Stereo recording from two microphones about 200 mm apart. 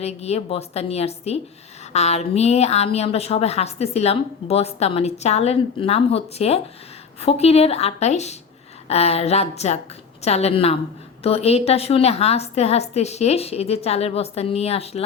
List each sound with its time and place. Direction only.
0.0 s a woman's voice: 30° left (ahead or behind)